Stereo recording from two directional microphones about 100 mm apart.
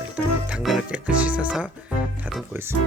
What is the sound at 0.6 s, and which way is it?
Speech, centre (ahead or behind).